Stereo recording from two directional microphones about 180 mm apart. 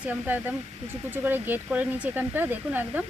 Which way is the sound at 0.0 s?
10° right (ahead or behind).